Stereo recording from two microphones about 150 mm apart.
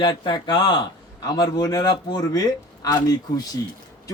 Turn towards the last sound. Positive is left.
turn(degrees=25)  # may be behind; listen again after turning